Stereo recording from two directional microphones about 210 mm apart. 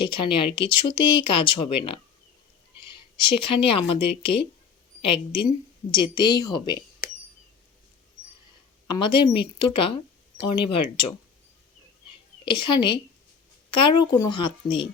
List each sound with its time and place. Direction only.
0.1 s speech: 25° left (ahead or behind)
8.9 s speech: 20° left (ahead or behind)
12.5 s speech: 20° left (ahead or behind)